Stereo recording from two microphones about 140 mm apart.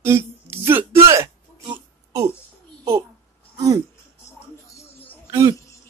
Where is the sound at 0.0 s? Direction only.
15° right (ahead or behind).